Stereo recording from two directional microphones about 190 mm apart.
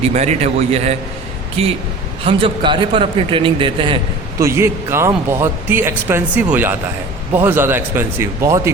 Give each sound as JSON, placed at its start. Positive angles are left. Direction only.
{"t": 0.1, "sound": "a man's voice", "side_deg": -35}
{"t": 4.4, "sound": "speech", "side_deg": -15}